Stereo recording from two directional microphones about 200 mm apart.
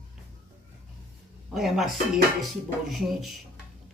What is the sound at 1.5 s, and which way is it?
Speech, centre (ahead or behind).